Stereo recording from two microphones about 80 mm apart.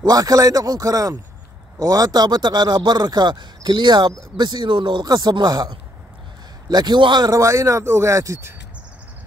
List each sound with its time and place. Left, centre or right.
0.0 s speech: right
5.0 s speech: right
7.2 s speech: right